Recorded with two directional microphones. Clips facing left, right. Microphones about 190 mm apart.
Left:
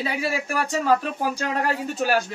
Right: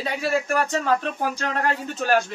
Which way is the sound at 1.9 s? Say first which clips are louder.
Right 2 dB; 10° left (ahead or behind).